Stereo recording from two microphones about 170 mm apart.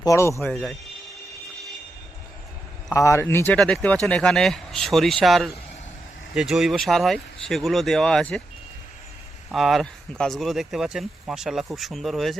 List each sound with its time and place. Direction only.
0.0 s speech: 15° left (ahead or behind)
0.4 s speech: centre (ahead or behind)
2.9 s speech: 15° left (ahead or behind)
9.5 s speech: centre (ahead or behind)